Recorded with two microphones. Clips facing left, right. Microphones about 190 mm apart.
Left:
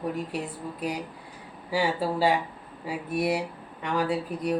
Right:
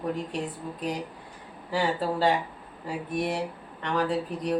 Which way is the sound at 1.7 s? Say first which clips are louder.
Left 1 dB; 10° left (ahead or behind).